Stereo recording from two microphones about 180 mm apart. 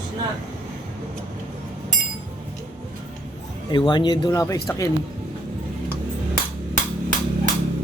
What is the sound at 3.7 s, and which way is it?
Speech, 25° left (ahead or behind).